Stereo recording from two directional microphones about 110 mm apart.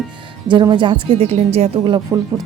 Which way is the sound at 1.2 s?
70° right (ahead or behind).